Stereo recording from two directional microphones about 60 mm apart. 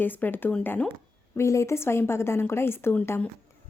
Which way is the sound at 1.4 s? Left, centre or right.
Left.